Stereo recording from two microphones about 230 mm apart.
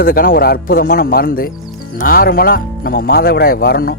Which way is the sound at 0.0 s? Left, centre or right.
Left.